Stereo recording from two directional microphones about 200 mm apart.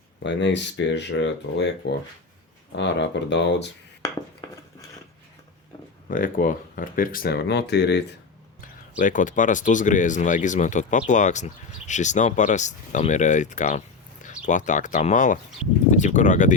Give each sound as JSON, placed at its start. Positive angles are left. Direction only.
{"t": 0.2, "sound": "speech", "side_deg": 60}
{"t": 6.1, "sound": "speech", "side_deg": 45}
{"t": 9.0, "sound": "speech", "side_deg": 40}